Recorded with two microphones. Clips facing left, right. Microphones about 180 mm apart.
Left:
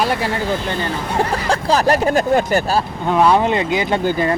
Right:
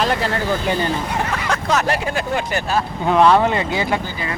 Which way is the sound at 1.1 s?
35° left (ahead or behind).